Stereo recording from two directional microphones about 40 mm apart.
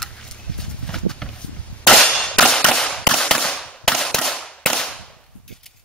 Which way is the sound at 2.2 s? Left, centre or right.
Centre.